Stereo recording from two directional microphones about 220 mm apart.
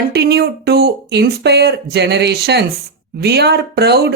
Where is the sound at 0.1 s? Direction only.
50° right (ahead or behind).